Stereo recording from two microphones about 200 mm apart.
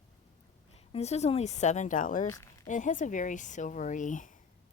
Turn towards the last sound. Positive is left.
turn(degrees=40)  # may be behind; listen again after turning